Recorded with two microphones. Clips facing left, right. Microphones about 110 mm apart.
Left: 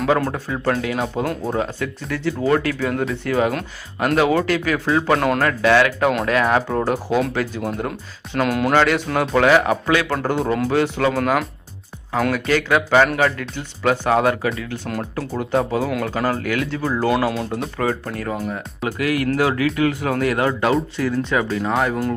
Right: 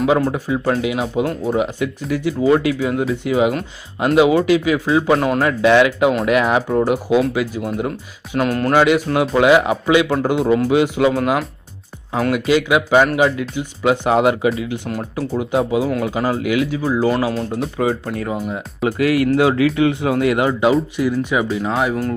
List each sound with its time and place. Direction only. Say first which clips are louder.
0.2 s speech: right 4 dB; 10° right (ahead or behind)
0.9 s speech: right 3 dB; 5° right (ahead or behind)
5.5 s speech: right 5 dB; 20° right (ahead or behind)
6.7 s speech: right 4 dB; 5° right (ahead or behind)
8.7 s speech: right 5 dB; 10° right (ahead or behind)
10.2 s speech: right 4 dB; centre (ahead or behind); by 14.5 s 20° right (ahead or behind)
14.9 s speech: right 3 dB; 5° right (ahead or behind)
18.3 s speech: right 2 dB; 15° right (ahead or behind)